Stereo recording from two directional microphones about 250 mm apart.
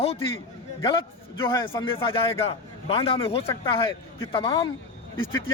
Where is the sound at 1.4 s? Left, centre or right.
Centre.